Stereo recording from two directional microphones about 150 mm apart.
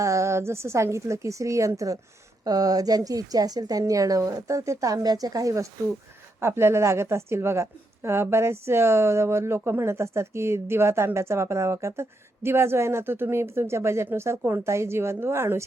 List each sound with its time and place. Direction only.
0.0 s a woman's voice: 20° right (ahead or behind)